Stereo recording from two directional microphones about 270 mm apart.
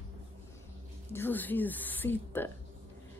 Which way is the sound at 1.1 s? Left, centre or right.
Centre.